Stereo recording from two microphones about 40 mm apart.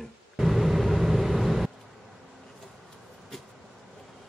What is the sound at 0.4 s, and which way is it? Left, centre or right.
Vehicle, centre.